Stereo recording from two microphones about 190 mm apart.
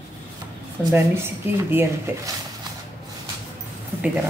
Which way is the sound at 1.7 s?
10° right (ahead or behind).